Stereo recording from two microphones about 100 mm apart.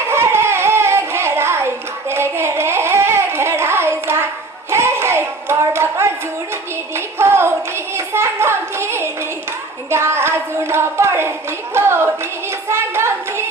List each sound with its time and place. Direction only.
0.1 s music: 25° right (ahead or behind)
4.7 s hands: 25° right (ahead or behind)
6.9 s music: 25° right (ahead or behind)
7.9 s clapping: 25° right (ahead or behind)
9.9 s a sound: 25° right (ahead or behind)